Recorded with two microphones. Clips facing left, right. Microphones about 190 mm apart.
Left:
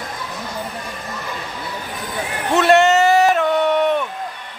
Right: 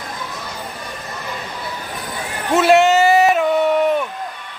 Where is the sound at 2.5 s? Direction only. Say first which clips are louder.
Right 1 dB; centre (ahead or behind).